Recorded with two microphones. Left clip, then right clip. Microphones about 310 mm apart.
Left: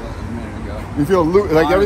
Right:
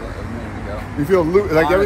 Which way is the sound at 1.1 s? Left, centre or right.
Left.